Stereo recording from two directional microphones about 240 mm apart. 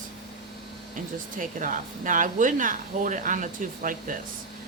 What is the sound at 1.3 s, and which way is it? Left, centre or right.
Speech, right.